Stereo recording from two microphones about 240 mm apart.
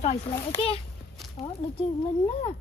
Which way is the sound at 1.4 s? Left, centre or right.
Left.